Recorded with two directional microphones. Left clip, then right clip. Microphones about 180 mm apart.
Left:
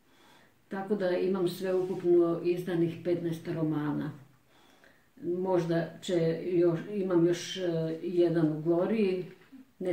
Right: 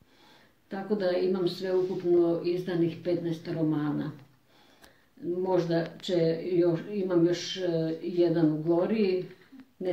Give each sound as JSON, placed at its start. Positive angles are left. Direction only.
{"t": 0.7, "sound": "speech", "side_deg": 5}
{"t": 5.5, "sound": "speech", "side_deg": 5}